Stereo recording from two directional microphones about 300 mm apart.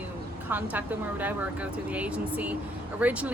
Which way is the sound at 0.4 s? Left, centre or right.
Centre.